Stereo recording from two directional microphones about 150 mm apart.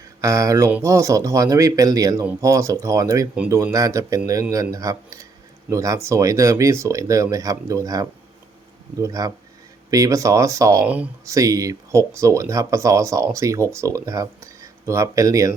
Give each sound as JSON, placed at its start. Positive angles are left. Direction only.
{"t": 0.2, "sound": "speech", "side_deg": -20}
{"t": 10.8, "sound": "speech", "side_deg": -10}
{"t": 11.3, "sound": "speech", "side_deg": -20}